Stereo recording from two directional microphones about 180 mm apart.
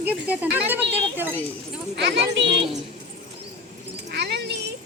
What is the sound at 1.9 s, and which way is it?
Speech, 75° right (ahead or behind).